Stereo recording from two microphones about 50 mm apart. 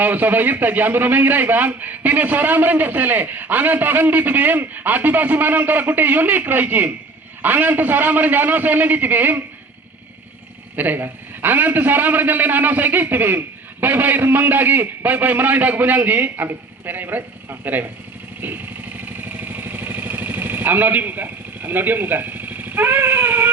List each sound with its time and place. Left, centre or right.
0.0 s a man's voice: right
10.8 s a man's voice: right
18.3 s vehicle: right